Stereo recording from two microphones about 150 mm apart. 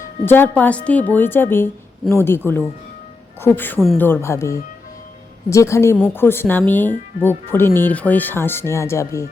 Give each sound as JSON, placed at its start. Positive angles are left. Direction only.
{"t": 0.3, "sound": "a woman's voice", "side_deg": 10}